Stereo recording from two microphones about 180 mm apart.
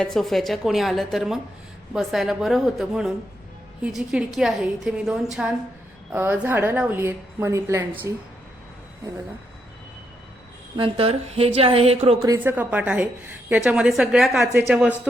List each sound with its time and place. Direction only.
0.0 s a woman's voice: centre (ahead or behind); by 8.1 s 15° right (ahead or behind)
10.8 s a woman's voice: 30° right (ahead or behind)
12.4 s a woman's voice: 10° right (ahead or behind)